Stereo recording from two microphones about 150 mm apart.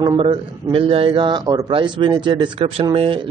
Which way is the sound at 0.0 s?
35° right (ahead or behind).